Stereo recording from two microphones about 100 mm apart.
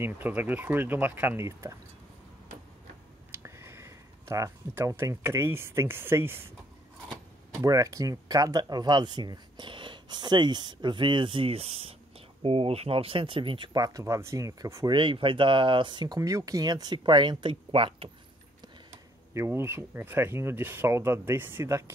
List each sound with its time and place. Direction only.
0.0 s speech: 20° right (ahead or behind)
3.3 s speech: 25° right (ahead or behind)
7.6 s speech: 35° right (ahead or behind); by 13.7 s 60° right (ahead or behind)
13.7 s speech: 35° right (ahead or behind)
14.9 s speech: 55° right (ahead or behind)
16.2 s speech: 35° right (ahead or behind); by 18.1 s 65° right (ahead or behind)
19.3 s speech: 25° right (ahead or behind)